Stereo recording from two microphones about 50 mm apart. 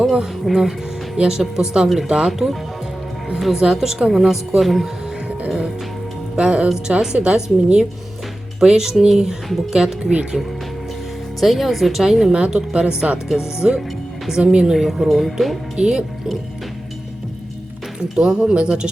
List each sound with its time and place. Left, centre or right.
0.0 s a woman's voice: centre
6.3 s music: centre
6.8 s a woman's voice: centre
11.3 s a woman's voice: centre
14.7 s speech: centre
15.7 s a woman's voice: centre
18.1 s a woman's voice: centre